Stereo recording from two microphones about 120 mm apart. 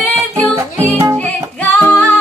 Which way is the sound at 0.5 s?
25° right (ahead or behind).